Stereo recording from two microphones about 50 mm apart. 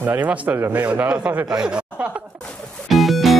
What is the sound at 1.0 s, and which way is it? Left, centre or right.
Speech, right.